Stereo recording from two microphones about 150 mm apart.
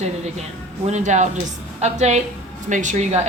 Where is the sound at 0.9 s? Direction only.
50° right (ahead or behind).